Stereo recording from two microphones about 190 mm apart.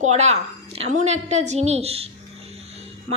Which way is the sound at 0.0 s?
35° right (ahead or behind).